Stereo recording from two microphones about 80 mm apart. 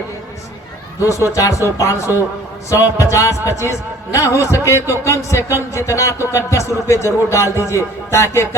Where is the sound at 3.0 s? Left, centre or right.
Left.